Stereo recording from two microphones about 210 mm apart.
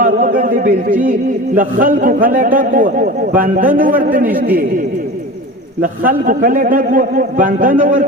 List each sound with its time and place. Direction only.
0.0 s a sound: 40° right (ahead or behind)
1.5 s a man's voice: 40° right (ahead or behind)
5.8 s a man's voice: 40° right (ahead or behind)